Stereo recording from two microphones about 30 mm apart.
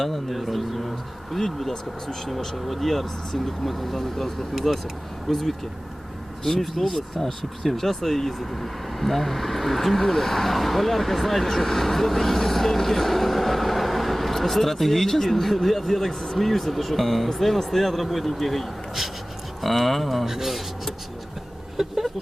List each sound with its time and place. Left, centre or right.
0.0 s speech: centre
4.7 s speech: centre
20.2 s speech: centre
21.8 s speech: centre